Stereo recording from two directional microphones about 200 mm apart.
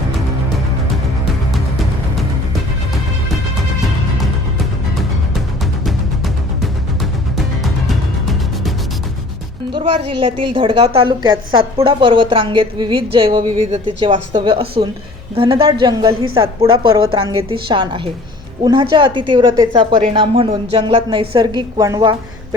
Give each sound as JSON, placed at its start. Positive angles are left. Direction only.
{"t": 1.5, "sound": "music", "side_deg": 0}
{"t": 5.8, "sound": "music", "side_deg": 0}
{"t": 9.7, "sound": "a woman's voice", "side_deg": -30}